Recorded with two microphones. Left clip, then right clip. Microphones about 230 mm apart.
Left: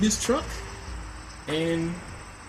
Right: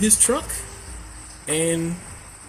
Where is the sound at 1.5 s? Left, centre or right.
Right.